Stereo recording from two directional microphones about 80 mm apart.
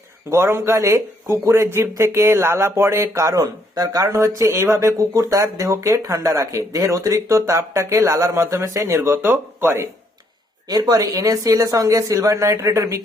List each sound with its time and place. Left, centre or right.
0.3 s speech: right
9.0 s speech: right
10.7 s speech: right